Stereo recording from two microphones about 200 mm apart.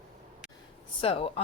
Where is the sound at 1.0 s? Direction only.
30° left (ahead or behind).